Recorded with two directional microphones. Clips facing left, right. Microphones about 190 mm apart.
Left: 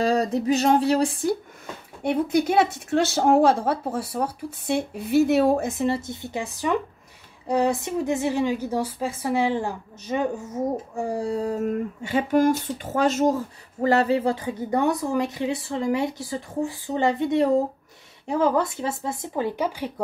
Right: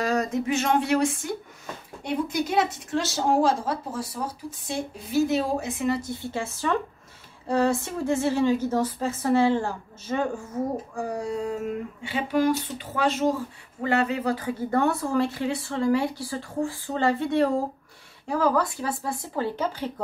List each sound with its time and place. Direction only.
0.0 s speech: 30° left (ahead or behind)
2.0 s speech: 60° left (ahead or behind)
5.9 s a woman's voice: 25° left (ahead or behind)